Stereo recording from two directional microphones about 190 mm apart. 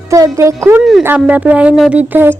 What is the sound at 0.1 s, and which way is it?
A woman's voice, 15° right (ahead or behind).